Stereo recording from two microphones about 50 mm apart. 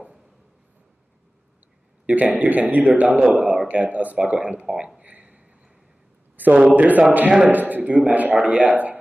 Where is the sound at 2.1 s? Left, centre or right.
Right.